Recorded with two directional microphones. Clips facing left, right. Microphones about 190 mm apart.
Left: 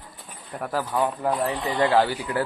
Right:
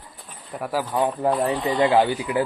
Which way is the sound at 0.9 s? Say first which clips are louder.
Right 3 dB; 20° right (ahead or behind).